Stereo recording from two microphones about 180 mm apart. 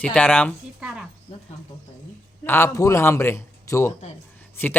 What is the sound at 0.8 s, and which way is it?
Speech, 5° right (ahead or behind).